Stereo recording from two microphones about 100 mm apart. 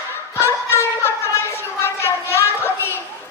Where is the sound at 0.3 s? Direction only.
25° left (ahead or behind).